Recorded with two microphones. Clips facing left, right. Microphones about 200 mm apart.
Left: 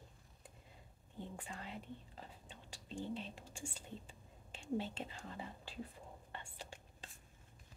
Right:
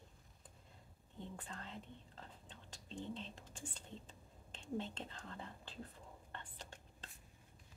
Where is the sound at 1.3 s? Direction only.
10° left (ahead or behind).